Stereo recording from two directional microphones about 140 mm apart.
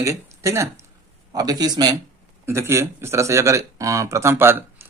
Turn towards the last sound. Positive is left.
turn(degrees=-15)  # may be behind; listen again after turning